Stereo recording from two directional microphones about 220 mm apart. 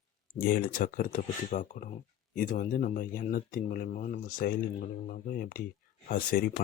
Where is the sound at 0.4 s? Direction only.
40° left (ahead or behind).